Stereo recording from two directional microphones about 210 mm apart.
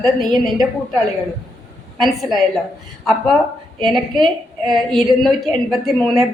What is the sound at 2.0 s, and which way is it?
Speech, centre (ahead or behind).